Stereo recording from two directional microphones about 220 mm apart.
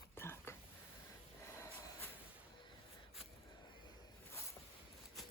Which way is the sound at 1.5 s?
10° left (ahead or behind).